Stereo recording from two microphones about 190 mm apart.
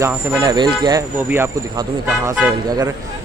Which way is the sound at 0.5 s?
20° right (ahead or behind).